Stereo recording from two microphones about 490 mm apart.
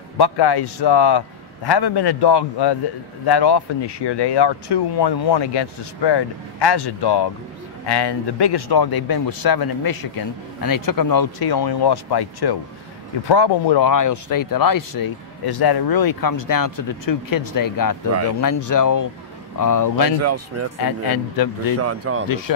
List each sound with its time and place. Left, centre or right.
0.2 s speech: left
20.2 s speech: right
20.8 s speech: left
21.7 s speech: right